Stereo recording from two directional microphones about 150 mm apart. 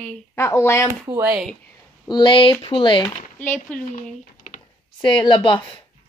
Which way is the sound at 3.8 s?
60° left (ahead or behind).